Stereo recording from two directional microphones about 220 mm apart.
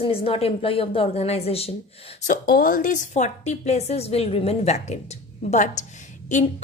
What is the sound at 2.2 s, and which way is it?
A woman's voice, 40° left (ahead or behind).